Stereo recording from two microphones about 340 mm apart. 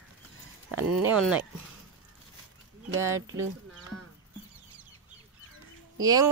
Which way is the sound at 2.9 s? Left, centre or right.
Centre.